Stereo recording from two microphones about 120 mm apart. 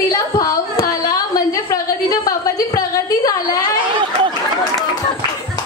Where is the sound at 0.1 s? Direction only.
30° left (ahead or behind).